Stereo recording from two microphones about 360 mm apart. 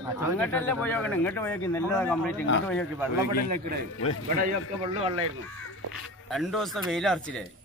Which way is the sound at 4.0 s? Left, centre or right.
Left.